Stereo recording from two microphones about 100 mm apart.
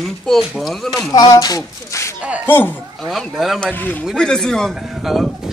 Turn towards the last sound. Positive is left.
turn(degrees=0)  # may be behind; listen again after turning